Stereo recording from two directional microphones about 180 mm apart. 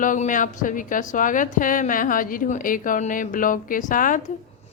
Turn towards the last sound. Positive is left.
turn(degrees=50)  # may be behind; listen again after turning